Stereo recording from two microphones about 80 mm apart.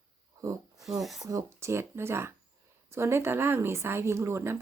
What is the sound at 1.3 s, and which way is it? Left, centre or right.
Speech, right.